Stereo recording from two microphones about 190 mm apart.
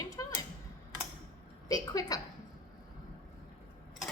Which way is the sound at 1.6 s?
20° left (ahead or behind).